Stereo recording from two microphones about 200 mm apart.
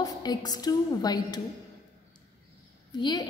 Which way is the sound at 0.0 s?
20° left (ahead or behind).